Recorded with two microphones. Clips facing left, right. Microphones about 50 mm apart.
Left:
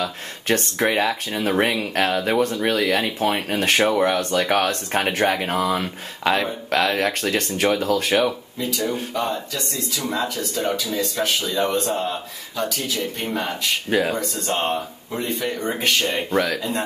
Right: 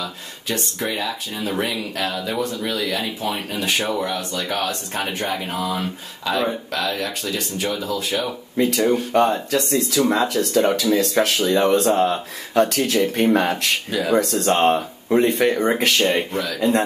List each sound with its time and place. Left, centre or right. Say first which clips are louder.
0.0 s speech: left 4 dB; left
8.7 s speech: right 6 dB; right
10.0 s speech: right 5 dB; right
10.5 s speech: right 9 dB; right
13.8 s speech: left 3 dB; left
14.1 s speech: right 7 dB; right